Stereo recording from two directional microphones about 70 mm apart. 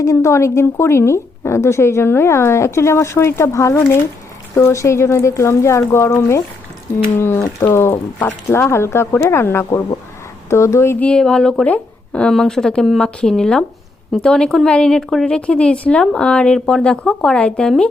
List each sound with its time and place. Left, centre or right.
0.0 s a woman's voice: left
11.0 s speech: centre
12.3 s speech: centre